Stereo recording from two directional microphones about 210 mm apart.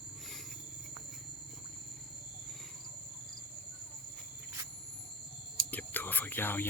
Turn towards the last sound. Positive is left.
turn(degrees=10)  # may be behind; listen again after turning